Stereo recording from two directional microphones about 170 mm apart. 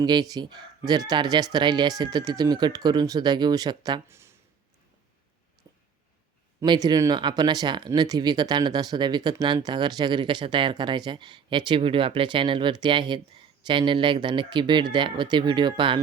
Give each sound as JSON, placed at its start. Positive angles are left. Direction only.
{"t": 0.0, "sound": "speech", "side_deg": -25}
{"t": 5.7, "sound": "a sound", "side_deg": -20}
{"t": 6.6, "sound": "speech", "side_deg": -25}